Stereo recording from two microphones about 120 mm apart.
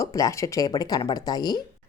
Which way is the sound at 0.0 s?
30° left (ahead or behind).